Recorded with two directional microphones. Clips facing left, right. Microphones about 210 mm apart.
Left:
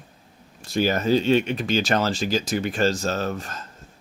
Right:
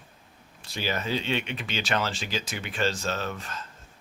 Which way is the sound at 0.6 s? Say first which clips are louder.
Left 9 dB; 45° left (ahead or behind).